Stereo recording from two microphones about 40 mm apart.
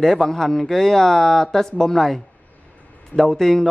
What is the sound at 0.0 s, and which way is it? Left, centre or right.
A man's voice, centre.